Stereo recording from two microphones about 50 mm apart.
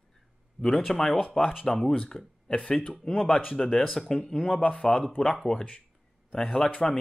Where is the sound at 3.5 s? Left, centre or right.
Centre.